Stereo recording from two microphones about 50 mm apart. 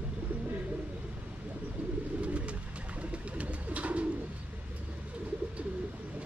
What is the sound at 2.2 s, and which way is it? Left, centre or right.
Bird, right.